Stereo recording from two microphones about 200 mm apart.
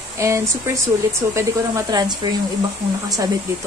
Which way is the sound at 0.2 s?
15° right (ahead or behind).